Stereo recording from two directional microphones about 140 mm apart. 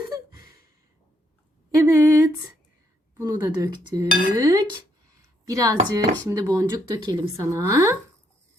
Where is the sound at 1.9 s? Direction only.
25° right (ahead or behind).